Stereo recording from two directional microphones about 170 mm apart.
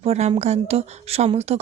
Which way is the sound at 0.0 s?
40° right (ahead or behind).